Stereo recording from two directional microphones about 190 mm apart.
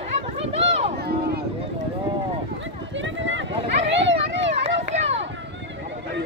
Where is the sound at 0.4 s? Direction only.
30° right (ahead or behind).